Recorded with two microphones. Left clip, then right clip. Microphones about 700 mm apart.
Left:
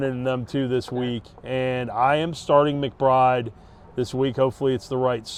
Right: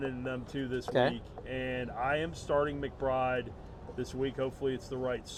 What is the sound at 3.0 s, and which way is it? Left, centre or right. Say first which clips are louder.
Speech: left 13 dB; left.